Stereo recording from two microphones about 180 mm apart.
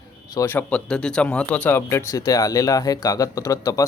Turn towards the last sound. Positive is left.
turn(degrees=15)  # may be behind; listen again after turning